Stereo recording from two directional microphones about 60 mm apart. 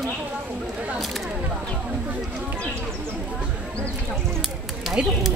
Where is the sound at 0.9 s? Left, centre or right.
Centre.